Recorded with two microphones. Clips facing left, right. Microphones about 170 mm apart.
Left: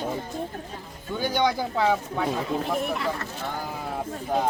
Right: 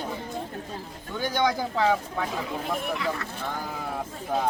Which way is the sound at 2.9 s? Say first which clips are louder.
Left 1 dB; 45° left (ahead or behind).